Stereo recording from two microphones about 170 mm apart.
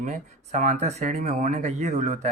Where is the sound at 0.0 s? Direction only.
45° right (ahead or behind).